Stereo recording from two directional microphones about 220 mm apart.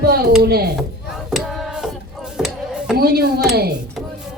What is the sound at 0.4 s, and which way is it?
Speech, 45° right (ahead or behind).